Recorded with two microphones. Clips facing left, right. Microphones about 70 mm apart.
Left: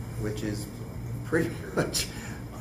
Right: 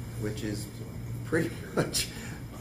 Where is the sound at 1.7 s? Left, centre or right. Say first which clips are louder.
Even; centre.